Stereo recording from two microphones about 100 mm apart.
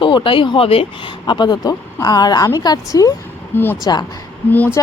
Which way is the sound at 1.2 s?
50° left (ahead or behind).